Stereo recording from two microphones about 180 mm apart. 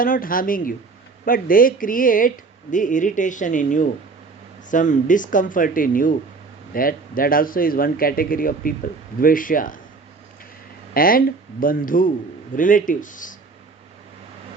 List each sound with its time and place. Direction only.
0.0 s speech: 50° left (ahead or behind)
10.9 s speech: 55° left (ahead or behind)